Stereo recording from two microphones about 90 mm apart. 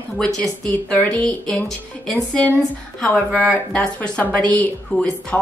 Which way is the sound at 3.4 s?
10° left (ahead or behind).